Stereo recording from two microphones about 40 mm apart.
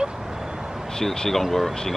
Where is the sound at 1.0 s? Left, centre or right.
Centre.